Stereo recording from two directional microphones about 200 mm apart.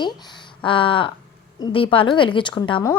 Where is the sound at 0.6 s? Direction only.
25° left (ahead or behind).